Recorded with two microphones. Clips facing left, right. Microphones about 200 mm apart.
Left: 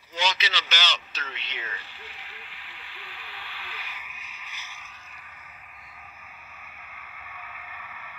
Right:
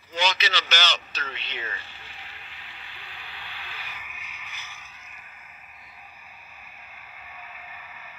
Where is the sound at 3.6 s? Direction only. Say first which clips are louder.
Even; 30° right (ahead or behind).